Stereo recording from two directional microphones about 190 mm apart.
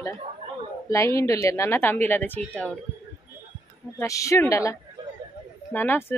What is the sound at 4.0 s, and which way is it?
Speech, 15° left (ahead or behind).